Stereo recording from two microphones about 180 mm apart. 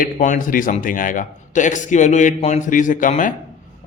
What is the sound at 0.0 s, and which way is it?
A man's voice, 45° left (ahead or behind).